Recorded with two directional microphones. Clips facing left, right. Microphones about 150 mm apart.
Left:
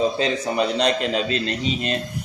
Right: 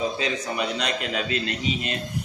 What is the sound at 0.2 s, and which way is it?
A man's voice, 30° left (ahead or behind).